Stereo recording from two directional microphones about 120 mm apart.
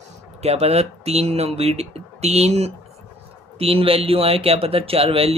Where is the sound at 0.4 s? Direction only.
60° right (ahead or behind).